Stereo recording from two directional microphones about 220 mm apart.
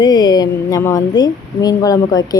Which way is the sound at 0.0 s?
20° left (ahead or behind).